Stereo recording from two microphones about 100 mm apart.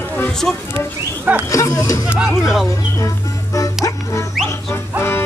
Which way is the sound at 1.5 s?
35° left (ahead or behind).